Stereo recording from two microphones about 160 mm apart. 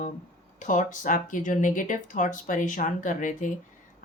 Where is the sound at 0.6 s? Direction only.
50° left (ahead or behind).